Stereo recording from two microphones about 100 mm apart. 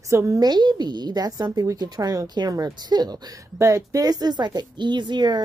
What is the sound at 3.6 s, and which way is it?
A woman's voice, 30° right (ahead or behind).